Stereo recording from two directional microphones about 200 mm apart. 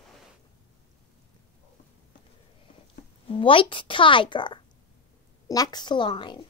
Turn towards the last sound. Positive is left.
turn(degrees=25)  # may be behind; listen again after turning